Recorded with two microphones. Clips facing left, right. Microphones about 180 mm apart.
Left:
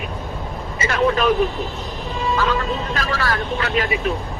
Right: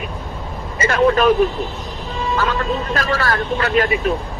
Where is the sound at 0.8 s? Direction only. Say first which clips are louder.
Right 4 dB; 45° right (ahead or behind).